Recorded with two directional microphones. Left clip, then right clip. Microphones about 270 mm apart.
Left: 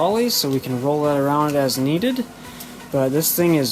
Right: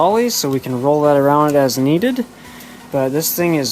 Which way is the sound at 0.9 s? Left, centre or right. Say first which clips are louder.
Right 7 dB; right.